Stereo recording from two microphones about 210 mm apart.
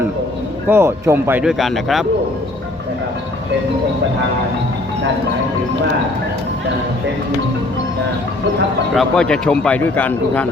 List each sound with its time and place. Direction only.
0.7 s speech: 10° right (ahead or behind)
9.0 s a man's voice: 5° left (ahead or behind)